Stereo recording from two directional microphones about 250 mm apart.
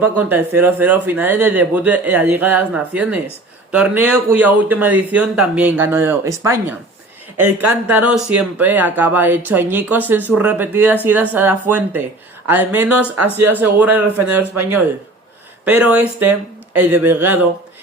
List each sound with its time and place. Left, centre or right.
0.0 s a man's voice: centre
7.3 s speech: right
7.7 s a man's voice: centre